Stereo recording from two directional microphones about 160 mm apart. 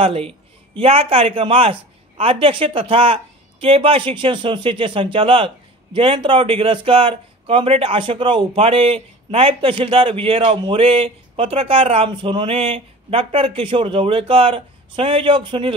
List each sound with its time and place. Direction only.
0.0 s a man's voice: 35° right (ahead or behind)